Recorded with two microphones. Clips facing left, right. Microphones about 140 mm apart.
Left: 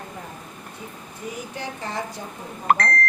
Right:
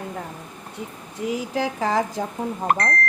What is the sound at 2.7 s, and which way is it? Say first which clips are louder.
Speech: left 3 dB; 90° left.